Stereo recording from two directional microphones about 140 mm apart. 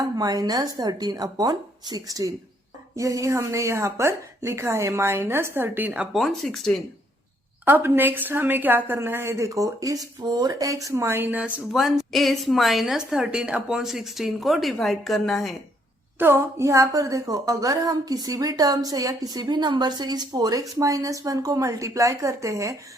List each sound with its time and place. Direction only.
0.0 s a woman's voice: 25° right (ahead or behind); by 6.7 s centre (ahead or behind)
7.6 s a woman's voice: 15° right (ahead or behind); by 15.5 s centre (ahead or behind)
16.1 s a woman's voice: 15° right (ahead or behind)